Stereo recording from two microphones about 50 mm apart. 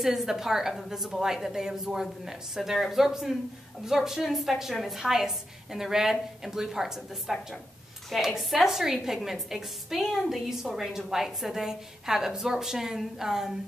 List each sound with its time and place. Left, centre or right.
0.0 s a woman's voice: centre